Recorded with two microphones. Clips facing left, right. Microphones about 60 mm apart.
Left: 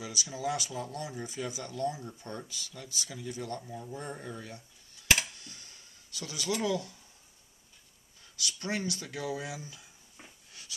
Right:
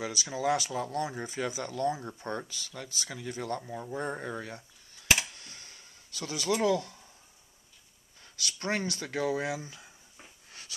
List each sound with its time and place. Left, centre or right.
0.0 s speech: right
2.9 s speech: right
5.4 s computer keyboard: right
6.1 s speech: right
8.5 s speech: right